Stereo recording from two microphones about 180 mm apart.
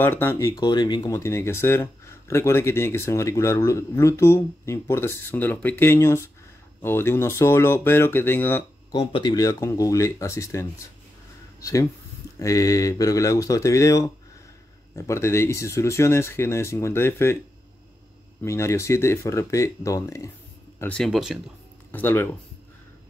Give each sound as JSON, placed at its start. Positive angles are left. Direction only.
{"t": 0.0, "sound": "speech", "side_deg": 10}
{"t": 0.6, "sound": "speech", "side_deg": 25}
{"t": 8.9, "sound": "speech", "side_deg": 25}
{"t": 18.4, "sound": "speech", "side_deg": 15}
{"t": 20.8, "sound": "speech", "side_deg": 5}
{"t": 21.9, "sound": "speech", "side_deg": 10}